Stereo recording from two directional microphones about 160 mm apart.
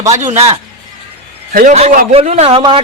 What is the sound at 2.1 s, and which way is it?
Speech, 45° right (ahead or behind).